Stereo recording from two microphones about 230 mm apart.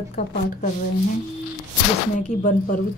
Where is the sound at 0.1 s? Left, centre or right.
Left.